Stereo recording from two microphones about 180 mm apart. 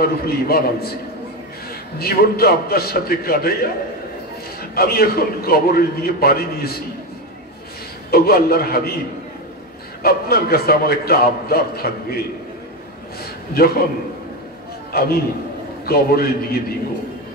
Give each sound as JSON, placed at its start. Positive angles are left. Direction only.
{"t": 0.0, "sound": "a man's voice", "side_deg": 60}
{"t": 2.0, "sound": "a man's voice", "side_deg": 60}
{"t": 4.7, "sound": "a man's voice", "side_deg": 55}
{"t": 8.1, "sound": "a man's voice", "side_deg": 60}
{"t": 10.0, "sound": "a man's voice", "side_deg": 60}
{"t": 13.2, "sound": "a man's voice", "side_deg": 55}
{"t": 14.9, "sound": "a man's voice", "side_deg": 60}